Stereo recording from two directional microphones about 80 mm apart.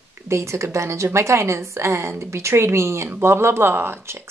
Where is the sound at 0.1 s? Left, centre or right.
Right.